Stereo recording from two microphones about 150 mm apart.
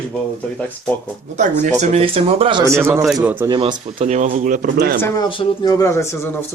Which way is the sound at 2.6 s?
15° right (ahead or behind).